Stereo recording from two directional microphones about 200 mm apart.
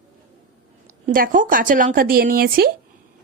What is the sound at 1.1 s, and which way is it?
Speech, 45° right (ahead or behind).